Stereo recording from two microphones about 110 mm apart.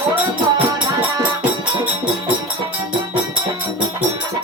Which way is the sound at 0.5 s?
35° right (ahead or behind).